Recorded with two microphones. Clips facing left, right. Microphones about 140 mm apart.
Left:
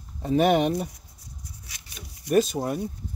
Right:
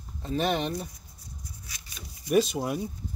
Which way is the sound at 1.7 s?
70° left (ahead or behind).